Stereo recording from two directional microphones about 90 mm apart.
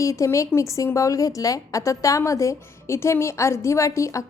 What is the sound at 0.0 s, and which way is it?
A woman's voice, 35° left (ahead or behind).